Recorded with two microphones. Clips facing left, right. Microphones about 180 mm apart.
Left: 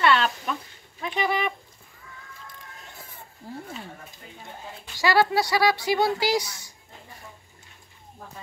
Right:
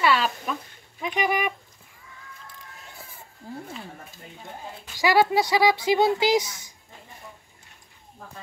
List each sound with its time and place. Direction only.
0.0 s a sound: 5° right (ahead or behind)
1.0 s speech: 15° right (ahead or behind)
4.9 s speech: 15° right (ahead or behind)